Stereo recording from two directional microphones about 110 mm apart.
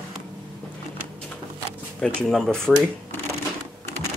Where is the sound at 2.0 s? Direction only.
5° left (ahead or behind).